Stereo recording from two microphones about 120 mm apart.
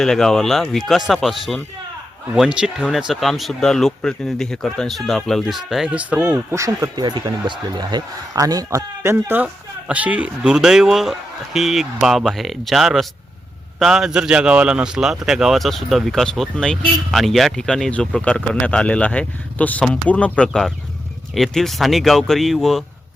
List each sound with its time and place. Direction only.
0.0 s a man's voice: 5° left (ahead or behind); by 6.4 s 10° right (ahead or behind)
6.5 s speech: 25° right (ahead or behind)
7.0 s speech: 35° right (ahead or behind)
9.1 s a man's voice: 15° right (ahead or behind); by 22.8 s centre (ahead or behind)